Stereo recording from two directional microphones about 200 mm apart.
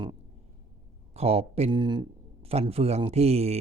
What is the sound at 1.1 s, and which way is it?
A man's voice, 30° right (ahead or behind).